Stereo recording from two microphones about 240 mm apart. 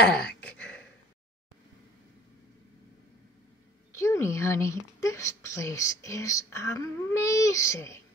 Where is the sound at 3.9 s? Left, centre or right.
Centre.